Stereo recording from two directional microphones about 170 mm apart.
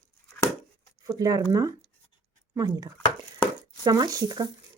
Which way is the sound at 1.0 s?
20° right (ahead or behind).